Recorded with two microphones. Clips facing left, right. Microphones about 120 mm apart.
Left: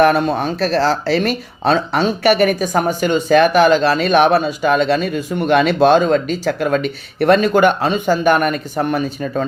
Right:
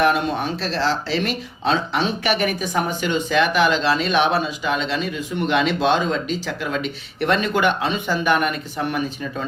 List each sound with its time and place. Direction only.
0.0 s speech: 45° left (ahead or behind)